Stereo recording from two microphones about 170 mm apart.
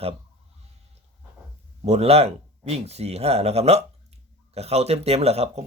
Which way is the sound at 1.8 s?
40° right (ahead or behind).